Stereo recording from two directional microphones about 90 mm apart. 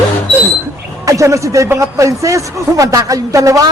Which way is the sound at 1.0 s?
35° right (ahead or behind).